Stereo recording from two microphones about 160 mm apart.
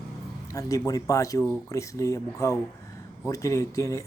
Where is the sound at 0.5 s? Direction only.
20° left (ahead or behind).